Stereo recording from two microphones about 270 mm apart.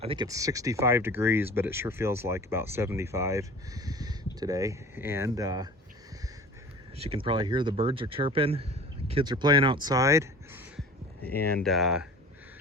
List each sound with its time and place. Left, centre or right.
0.0 s speech: centre
7.0 s speech: centre
11.6 s speech: centre